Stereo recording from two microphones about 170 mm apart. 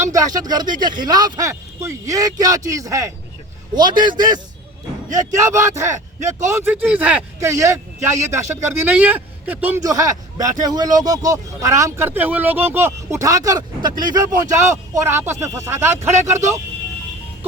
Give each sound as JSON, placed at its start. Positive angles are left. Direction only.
{"t": 0.0, "sound": "speech", "side_deg": -20}
{"t": 5.1, "sound": "a man's voice", "side_deg": -15}
{"t": 16.3, "sound": "speech", "side_deg": -45}